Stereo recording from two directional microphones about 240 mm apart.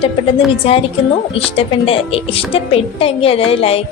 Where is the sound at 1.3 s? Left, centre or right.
Left.